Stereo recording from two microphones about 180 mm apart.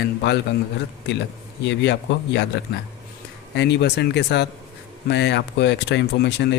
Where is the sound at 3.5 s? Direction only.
70° left (ahead or behind).